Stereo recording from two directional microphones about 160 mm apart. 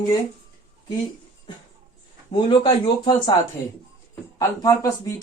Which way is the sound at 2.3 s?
30° left (ahead or behind).